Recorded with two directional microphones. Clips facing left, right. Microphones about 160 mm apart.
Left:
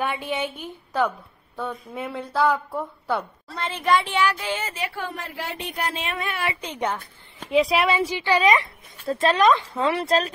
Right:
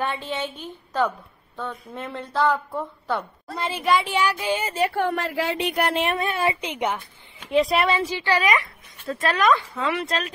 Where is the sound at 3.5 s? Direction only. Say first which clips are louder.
Even; 10° right (ahead or behind).